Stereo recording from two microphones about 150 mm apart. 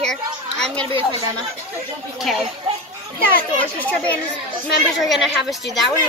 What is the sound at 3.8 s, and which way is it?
Speech, 10° left (ahead or behind).